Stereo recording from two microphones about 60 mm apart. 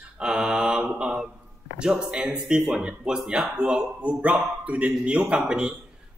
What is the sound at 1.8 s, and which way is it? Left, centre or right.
A man's voice, centre.